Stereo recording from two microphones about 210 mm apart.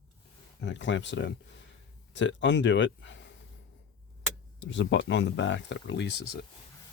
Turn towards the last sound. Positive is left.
turn(degrees=50)  # may be behind; listen again after turning